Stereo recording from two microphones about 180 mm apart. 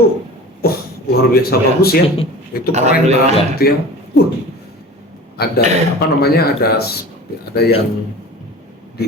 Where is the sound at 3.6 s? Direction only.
60° left (ahead or behind).